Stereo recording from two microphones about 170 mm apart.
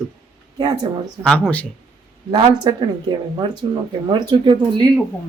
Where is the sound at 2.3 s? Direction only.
25° right (ahead or behind).